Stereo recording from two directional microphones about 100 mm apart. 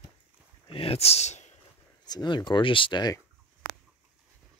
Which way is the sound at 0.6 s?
70° left (ahead or behind).